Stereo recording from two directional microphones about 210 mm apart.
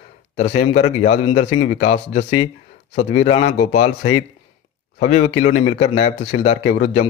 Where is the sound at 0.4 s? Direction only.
30° left (ahead or behind).